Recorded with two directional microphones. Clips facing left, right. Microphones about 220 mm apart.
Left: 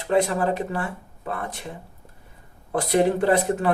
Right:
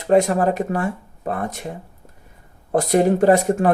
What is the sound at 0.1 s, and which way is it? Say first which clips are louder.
Speech: right 5 dB; 45° right (ahead or behind).